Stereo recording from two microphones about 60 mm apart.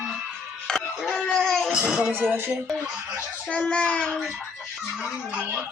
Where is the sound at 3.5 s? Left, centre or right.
Centre.